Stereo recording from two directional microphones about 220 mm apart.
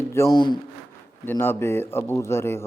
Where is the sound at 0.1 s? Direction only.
15° left (ahead or behind).